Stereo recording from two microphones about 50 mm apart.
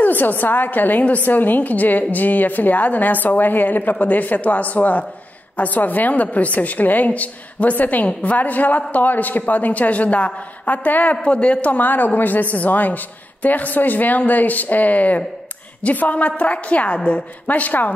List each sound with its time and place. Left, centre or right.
0.0 s a woman's voice: left
11.2 s a woman's voice: left